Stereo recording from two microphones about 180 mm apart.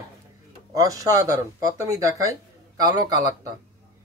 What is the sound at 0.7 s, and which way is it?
Speech, 20° right (ahead or behind).